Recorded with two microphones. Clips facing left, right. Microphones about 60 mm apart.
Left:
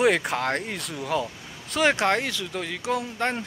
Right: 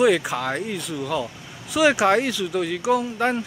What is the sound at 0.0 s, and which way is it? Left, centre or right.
Speech, centre.